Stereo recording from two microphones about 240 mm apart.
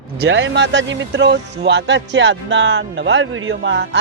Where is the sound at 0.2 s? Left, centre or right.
Right.